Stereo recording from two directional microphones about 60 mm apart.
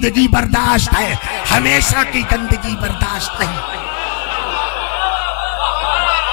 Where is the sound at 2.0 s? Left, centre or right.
Left.